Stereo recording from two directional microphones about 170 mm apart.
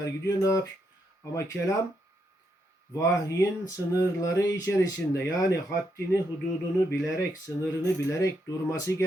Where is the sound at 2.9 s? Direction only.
20° left (ahead or behind).